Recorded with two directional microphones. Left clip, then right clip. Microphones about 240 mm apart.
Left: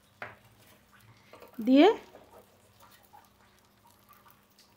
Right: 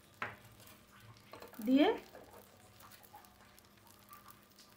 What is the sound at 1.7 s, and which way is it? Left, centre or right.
Speech, left.